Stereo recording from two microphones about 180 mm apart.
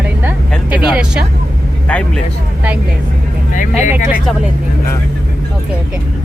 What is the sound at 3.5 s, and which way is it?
Speech, 45° left (ahead or behind).